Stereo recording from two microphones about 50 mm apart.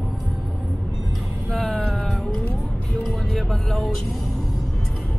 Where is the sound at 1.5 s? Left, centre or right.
Left.